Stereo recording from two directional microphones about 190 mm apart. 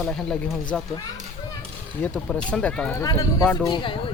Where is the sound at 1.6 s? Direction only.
5° left (ahead or behind).